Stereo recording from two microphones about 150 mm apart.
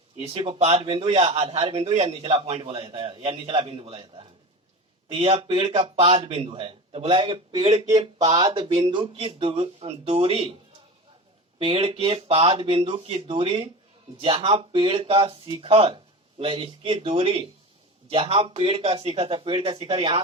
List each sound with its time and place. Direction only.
0.2 s a man's voice: 35° right (ahead or behind)
7.7 s a man's voice: 45° right (ahead or behind)
11.6 s a man's voice: 40° right (ahead or behind)